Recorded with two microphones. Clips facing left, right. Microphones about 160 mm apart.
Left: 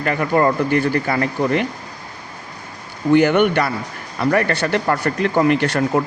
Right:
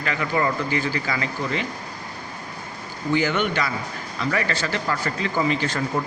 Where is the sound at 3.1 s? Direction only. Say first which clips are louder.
Left 9 dB; 60° left (ahead or behind).